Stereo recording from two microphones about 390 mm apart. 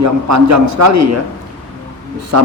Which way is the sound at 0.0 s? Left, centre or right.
Right.